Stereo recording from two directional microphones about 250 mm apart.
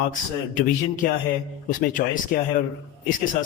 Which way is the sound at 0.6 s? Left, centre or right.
Left.